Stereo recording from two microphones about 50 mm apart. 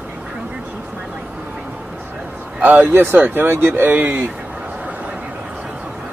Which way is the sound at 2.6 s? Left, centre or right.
Right.